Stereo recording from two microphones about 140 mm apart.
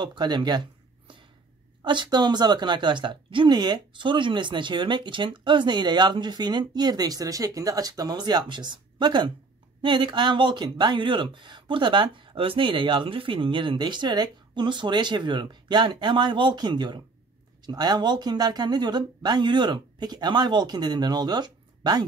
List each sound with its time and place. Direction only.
0.0 s a woman's voice: 30° right (ahead or behind)